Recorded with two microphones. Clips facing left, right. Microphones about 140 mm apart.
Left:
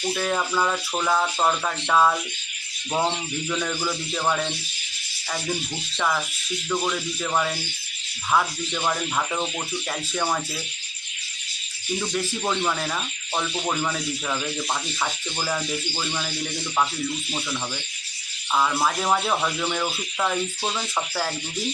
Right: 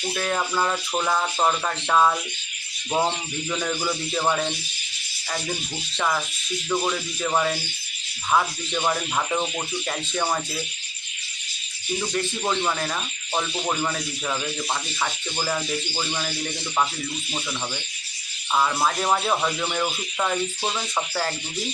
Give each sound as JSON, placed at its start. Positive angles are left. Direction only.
{"t": 0.1, "sound": "speech", "side_deg": 5}
{"t": 0.5, "sound": "speech", "side_deg": -5}
{"t": 3.5, "sound": "speech", "side_deg": -10}
{"t": 6.0, "sound": "speech", "side_deg": -5}
{"t": 11.9, "sound": "speech", "side_deg": 0}
{"t": 18.5, "sound": "speech", "side_deg": -5}